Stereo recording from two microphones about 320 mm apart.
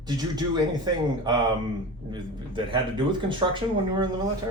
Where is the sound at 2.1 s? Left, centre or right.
Centre.